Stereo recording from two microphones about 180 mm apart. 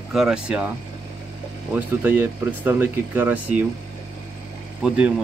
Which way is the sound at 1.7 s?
10° right (ahead or behind).